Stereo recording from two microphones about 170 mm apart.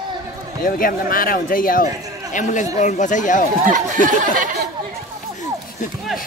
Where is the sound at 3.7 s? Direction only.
45° right (ahead or behind).